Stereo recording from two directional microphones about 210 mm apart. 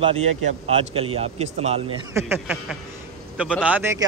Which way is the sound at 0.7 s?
30° right (ahead or behind).